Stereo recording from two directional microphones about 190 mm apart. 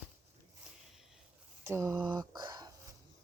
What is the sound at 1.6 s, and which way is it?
Speech, 15° right (ahead or behind).